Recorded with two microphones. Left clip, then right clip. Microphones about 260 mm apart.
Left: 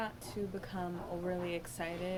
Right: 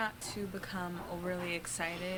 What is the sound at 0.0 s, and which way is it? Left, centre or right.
A woman's voice, right.